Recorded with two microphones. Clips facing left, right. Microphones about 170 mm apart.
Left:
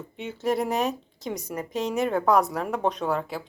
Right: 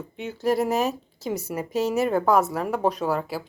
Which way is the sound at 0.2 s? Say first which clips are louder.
Right 3 dB; centre (ahead or behind).